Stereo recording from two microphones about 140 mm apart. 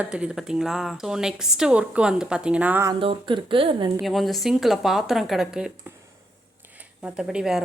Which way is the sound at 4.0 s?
Centre (ahead or behind).